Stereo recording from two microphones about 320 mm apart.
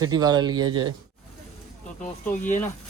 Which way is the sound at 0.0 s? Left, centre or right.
Centre.